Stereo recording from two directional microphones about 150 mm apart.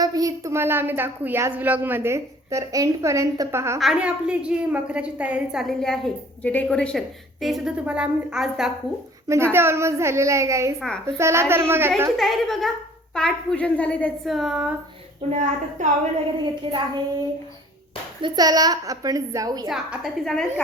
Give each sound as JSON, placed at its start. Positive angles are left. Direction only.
{"t": 0.0, "sound": "a woman's voice", "side_deg": -25}
{"t": 3.8, "sound": "a woman's voice", "side_deg": -5}
{"t": 9.2, "sound": "a child's voice", "side_deg": -20}
{"t": 10.8, "sound": "a woman's voice", "side_deg": 5}
{"t": 11.0, "sound": "a woman's voice", "side_deg": -20}
{"t": 12.1, "sound": "a woman's voice", "side_deg": 0}
{"t": 15.3, "sound": "a woman's voice", "side_deg": -50}
{"t": 16.4, "sound": "a child's voice", "side_deg": -30}
{"t": 19.6, "sound": "a woman's voice", "side_deg": -5}